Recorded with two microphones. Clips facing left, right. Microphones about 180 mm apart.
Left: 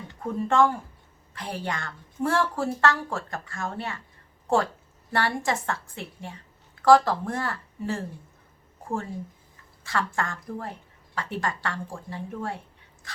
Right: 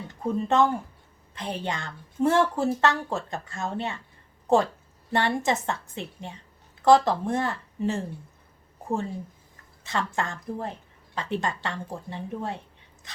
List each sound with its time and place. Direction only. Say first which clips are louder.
0.2 s a woman's voice: even; 20° right (ahead or behind)
9.8 s a woman's voice: even; 20° right (ahead or behind)
13.1 s dog: left 2 dB; 20° right (ahead or behind)